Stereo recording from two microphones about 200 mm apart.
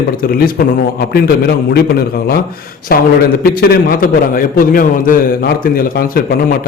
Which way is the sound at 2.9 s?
50° left (ahead or behind).